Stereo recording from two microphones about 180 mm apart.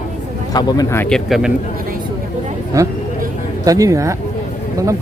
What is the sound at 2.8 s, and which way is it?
Speech, 20° right (ahead or behind).